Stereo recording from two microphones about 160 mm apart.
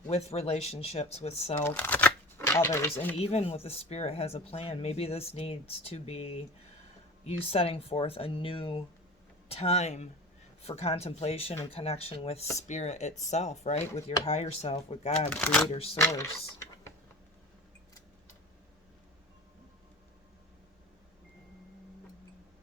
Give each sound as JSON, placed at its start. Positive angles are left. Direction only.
{"t": 0.1, "sound": "speech", "side_deg": 40}
{"t": 1.6, "sound": "speech", "side_deg": 10}
{"t": 3.2, "sound": "speech", "side_deg": 40}
{"t": 15.3, "sound": "speech", "side_deg": 10}